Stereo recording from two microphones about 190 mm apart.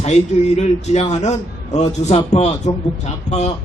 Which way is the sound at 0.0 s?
35° left (ahead or behind).